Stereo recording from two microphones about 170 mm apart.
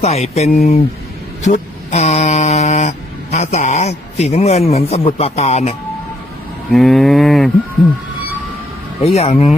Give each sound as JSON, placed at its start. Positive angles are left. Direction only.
{"t": 0.0, "sound": "a man's voice", "side_deg": 40}
{"t": 1.5, "sound": "mantra", "side_deg": 40}
{"t": 3.3, "sound": "a man's voice", "side_deg": 40}
{"t": 6.7, "sound": "livestock", "side_deg": 0}
{"t": 9.1, "sound": "a man's voice", "side_deg": 35}